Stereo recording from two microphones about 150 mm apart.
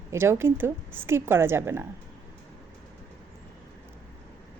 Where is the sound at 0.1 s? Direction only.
15° right (ahead or behind).